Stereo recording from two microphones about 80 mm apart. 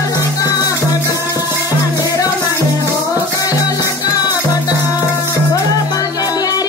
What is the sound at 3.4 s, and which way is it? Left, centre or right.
Music, left.